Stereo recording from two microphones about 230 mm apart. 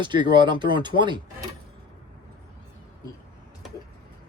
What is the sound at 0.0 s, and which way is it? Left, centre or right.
Speech, centre.